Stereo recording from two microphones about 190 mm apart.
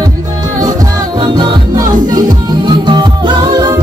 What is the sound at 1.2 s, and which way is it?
Music, 20° right (ahead or behind).